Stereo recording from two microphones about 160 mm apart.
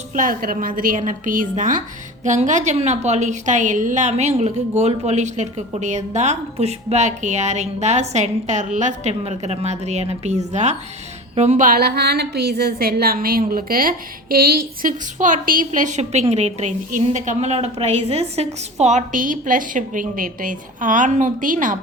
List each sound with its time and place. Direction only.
0.1 s a woman's voice: 60° right (ahead or behind)